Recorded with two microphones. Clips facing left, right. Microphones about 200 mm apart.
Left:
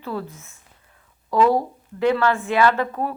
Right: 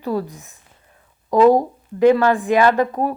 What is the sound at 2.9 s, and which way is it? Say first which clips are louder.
Speech: right 5 dB; 40° right (ahead or behind).